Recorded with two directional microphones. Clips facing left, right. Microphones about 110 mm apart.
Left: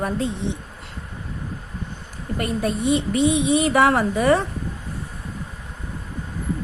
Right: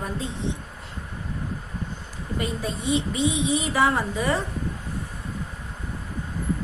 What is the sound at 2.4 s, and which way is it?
Speech, 60° left (ahead or behind).